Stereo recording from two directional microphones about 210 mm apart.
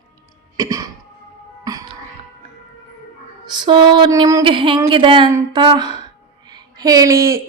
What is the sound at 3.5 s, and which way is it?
A woman's voice, 20° right (ahead or behind).